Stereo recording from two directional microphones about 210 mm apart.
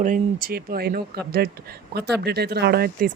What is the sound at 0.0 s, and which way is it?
Speech, 40° right (ahead or behind).